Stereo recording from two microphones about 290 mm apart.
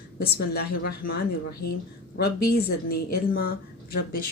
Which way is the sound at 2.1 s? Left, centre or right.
Left.